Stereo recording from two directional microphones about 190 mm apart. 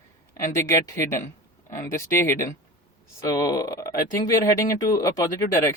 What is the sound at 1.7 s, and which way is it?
Speech, 15° left (ahead or behind).